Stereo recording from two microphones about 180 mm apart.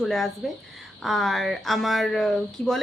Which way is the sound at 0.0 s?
Centre (ahead or behind).